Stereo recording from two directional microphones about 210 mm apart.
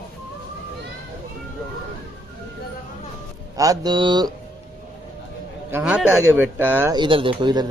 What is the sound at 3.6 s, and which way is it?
Speech, 15° right (ahead or behind).